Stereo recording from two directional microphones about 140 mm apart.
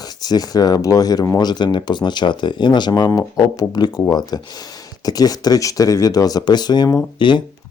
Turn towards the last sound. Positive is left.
turn(degrees=35)  # may be behind; listen again after turning